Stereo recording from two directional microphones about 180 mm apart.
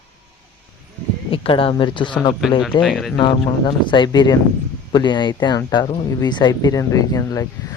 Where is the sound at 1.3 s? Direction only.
30° left (ahead or behind).